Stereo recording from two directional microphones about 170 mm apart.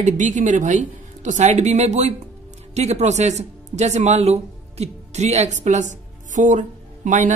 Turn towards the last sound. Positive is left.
turn(degrees=-45)  # may be behind; listen again after turning